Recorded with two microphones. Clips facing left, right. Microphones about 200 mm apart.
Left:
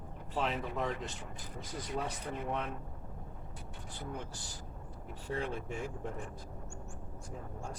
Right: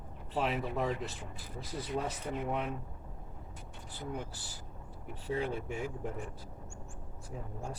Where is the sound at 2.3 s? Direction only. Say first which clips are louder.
Right 3 dB; 10° right (ahead or behind).